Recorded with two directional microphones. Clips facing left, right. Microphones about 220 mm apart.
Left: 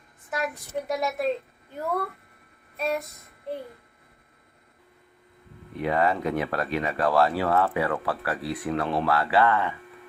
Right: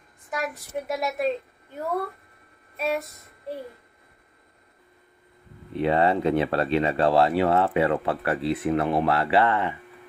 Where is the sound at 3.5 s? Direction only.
Centre (ahead or behind).